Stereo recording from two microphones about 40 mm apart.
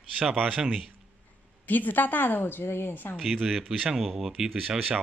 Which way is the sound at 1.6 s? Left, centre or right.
Left.